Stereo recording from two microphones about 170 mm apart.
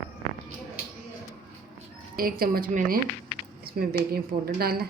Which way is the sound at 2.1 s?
60° right (ahead or behind).